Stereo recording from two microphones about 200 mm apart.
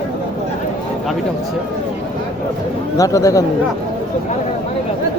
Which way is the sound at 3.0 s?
15° left (ahead or behind).